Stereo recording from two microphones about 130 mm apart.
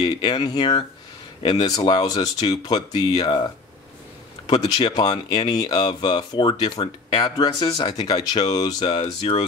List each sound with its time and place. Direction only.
0.0 s speech: 35° left (ahead or behind)
4.5 s speech: 35° left (ahead or behind)
9.0 s speech: 50° left (ahead or behind)